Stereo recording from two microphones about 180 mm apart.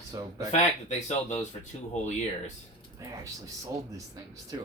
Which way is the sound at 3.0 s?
15° right (ahead or behind).